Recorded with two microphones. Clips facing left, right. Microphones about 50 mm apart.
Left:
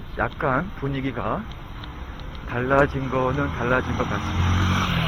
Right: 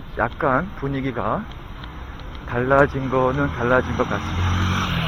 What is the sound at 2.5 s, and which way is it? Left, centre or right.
Speech, centre.